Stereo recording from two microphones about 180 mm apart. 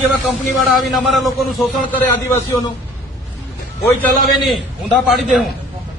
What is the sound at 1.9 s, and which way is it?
Speech, 10° left (ahead or behind).